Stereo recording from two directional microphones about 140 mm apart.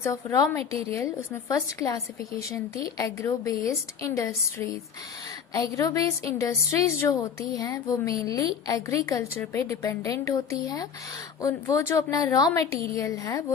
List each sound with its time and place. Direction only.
0.0 s a woman's voice: 20° left (ahead or behind)